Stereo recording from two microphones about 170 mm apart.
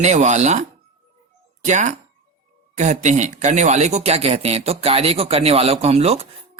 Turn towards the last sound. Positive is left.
turn(degrees=-35)  # may be behind; listen again after turning